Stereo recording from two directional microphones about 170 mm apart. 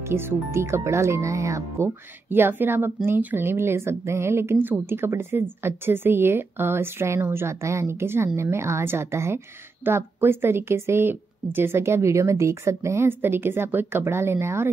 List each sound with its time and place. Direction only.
0.0 s speech: 15° right (ahead or behind)